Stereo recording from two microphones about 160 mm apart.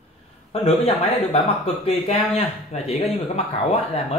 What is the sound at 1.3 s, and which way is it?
Speech, 40° left (ahead or behind).